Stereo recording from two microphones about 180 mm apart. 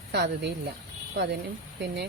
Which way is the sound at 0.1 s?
65° right (ahead or behind).